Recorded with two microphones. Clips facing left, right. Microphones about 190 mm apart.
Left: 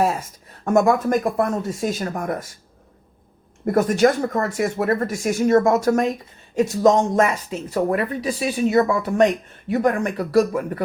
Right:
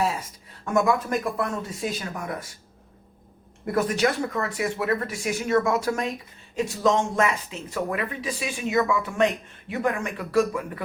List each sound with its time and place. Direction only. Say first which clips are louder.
0.0 s speech: left 5 dB; 45° left (ahead or behind)
3.7 s speech: left 6 dB; 45° left (ahead or behind)